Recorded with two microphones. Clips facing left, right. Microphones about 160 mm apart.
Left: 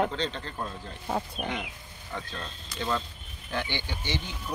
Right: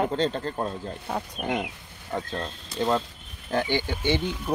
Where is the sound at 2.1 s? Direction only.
50° right (ahead or behind).